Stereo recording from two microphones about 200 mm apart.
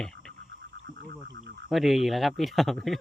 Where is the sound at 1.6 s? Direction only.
Centre (ahead or behind).